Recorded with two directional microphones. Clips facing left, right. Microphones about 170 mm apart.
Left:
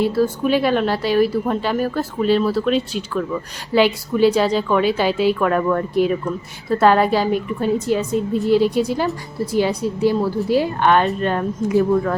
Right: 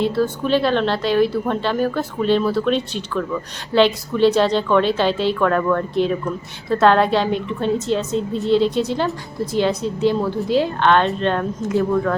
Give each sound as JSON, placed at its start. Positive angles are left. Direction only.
{"t": 0.0, "sound": "speech", "side_deg": 10}